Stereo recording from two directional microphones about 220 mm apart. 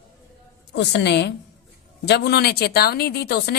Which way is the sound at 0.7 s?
50° left (ahead or behind).